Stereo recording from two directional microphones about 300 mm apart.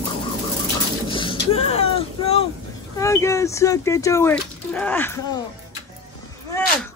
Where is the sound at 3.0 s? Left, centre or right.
Centre.